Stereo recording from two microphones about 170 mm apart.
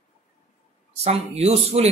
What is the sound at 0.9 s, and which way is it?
Speech, 40° right (ahead or behind).